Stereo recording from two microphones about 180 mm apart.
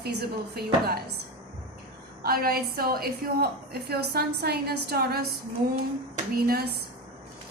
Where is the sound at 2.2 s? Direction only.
55° right (ahead or behind).